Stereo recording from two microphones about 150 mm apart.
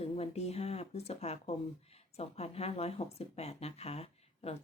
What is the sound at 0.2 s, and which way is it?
Speech, 45° left (ahead or behind).